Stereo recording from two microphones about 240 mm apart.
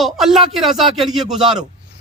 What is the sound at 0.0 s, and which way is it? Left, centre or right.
A man's voice, centre.